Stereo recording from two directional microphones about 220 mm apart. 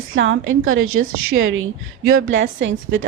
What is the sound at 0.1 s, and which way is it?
A woman's voice, 65° right (ahead or behind).